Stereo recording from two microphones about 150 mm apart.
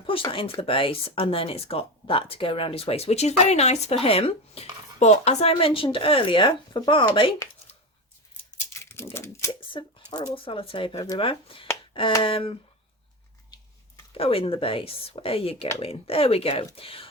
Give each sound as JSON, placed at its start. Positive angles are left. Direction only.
{"t": 0.3, "sound": "speech", "side_deg": 35}
{"t": 9.1, "sound": "typewriter", "side_deg": 15}
{"t": 9.6, "sound": "a sound", "side_deg": 30}
{"t": 10.3, "sound": "speech", "side_deg": 35}
{"t": 11.2, "sound": "speech", "side_deg": 35}
{"t": 14.1, "sound": "speech", "side_deg": 40}